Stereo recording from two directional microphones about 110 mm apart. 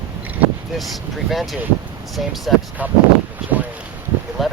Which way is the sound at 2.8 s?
15° right (ahead or behind).